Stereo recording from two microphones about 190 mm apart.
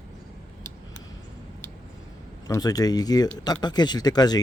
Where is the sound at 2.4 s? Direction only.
20° left (ahead or behind).